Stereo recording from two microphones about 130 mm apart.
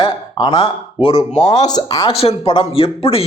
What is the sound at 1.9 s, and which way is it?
A man's voice, 45° left (ahead or behind).